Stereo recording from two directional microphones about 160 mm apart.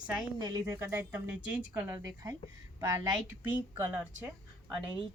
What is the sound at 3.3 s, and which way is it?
Speech, 10° right (ahead or behind).